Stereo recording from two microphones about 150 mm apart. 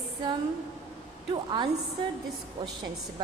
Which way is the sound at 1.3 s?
30° right (ahead or behind).